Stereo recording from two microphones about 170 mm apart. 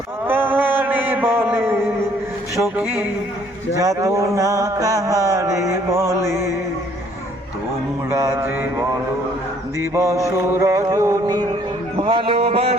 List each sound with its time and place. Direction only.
0.3 s mantra: 10° right (ahead or behind)
2.7 s music: 10° right (ahead or behind)
3.8 s mantra: 20° right (ahead or behind)
8.1 s music: 15° right (ahead or behind)
11.9 s music: 30° right (ahead or behind)
12.5 s a sound: 35° right (ahead or behind)